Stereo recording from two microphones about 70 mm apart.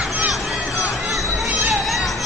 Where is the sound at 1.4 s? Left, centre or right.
Centre.